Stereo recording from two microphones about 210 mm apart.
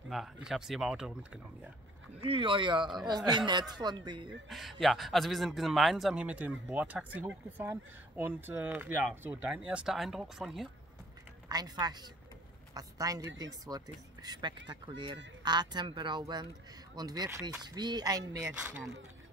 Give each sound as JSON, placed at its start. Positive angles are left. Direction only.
{"t": 0.1, "sound": "a man's voice", "side_deg": 0}
{"t": 2.2, "sound": "speech", "side_deg": -25}
{"t": 4.5, "sound": "a man's voice", "side_deg": 0}
{"t": 11.4, "sound": "speech", "side_deg": -20}
{"t": 18.6, "sound": "speech", "side_deg": -5}